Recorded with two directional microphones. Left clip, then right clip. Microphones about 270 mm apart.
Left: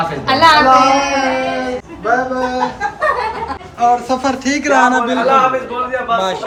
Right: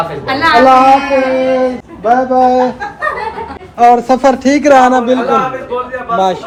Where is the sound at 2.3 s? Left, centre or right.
Centre.